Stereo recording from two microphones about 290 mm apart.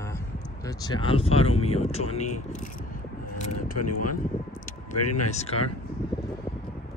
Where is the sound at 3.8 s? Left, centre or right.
Left.